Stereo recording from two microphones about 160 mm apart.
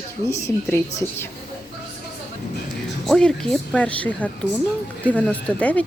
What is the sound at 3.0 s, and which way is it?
Speech, centre (ahead or behind).